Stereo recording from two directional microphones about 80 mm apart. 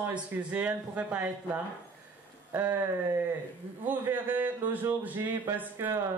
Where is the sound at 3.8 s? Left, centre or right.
Right.